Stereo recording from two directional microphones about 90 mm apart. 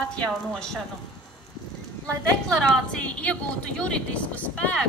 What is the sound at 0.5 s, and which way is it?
Speech, 5° left (ahead or behind).